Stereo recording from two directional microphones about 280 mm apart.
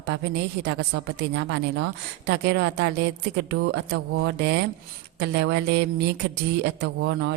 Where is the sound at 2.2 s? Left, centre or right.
Right.